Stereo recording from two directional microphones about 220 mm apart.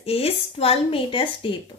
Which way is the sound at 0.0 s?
25° left (ahead or behind).